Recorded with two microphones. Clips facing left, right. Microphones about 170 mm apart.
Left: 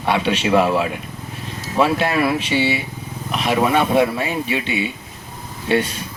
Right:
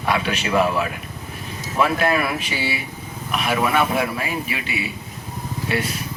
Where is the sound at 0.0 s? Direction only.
30° left (ahead or behind).